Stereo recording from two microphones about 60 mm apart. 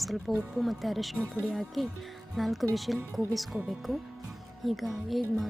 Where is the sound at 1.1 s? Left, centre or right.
Centre.